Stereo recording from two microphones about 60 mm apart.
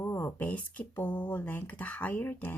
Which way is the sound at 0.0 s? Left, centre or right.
Left.